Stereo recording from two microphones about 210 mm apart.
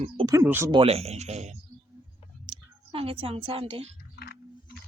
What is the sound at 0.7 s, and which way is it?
Speech, 25° right (ahead or behind).